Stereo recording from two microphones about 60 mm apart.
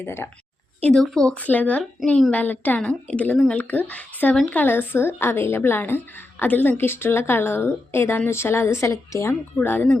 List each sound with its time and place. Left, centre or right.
0.0 s a woman's voice: left
0.9 s speech: centre
1.3 s a woman's voice: left
2.0 s speech: centre
2.3 s a woman's voice: left
9.6 s a woman's voice: left